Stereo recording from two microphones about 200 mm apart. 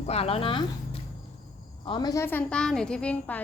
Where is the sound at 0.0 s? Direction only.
30° left (ahead or behind).